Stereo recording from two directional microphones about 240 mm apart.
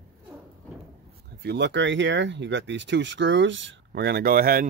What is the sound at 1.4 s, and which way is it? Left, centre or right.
Speech, right.